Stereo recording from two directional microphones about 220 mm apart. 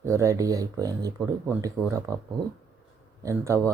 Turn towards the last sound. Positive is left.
turn(degrees=-15)  # may be behind; listen again after turning